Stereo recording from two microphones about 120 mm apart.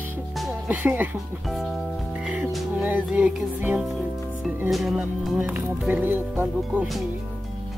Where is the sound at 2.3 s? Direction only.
10° right (ahead or behind).